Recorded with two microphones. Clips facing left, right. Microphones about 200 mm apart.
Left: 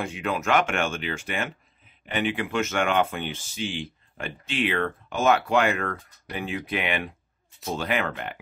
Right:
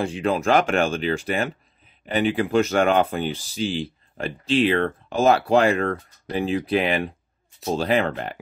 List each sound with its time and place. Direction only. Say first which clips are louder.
0.0 s speech: right 6 dB; 30° right (ahead or behind)